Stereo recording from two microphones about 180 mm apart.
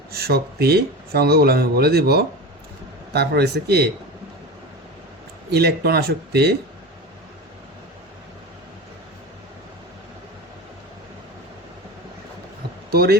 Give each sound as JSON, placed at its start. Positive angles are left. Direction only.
{"t": 0.1, "sound": "speech", "side_deg": -60}
{"t": 5.5, "sound": "speech", "side_deg": -65}
{"t": 12.9, "sound": "speech", "side_deg": -60}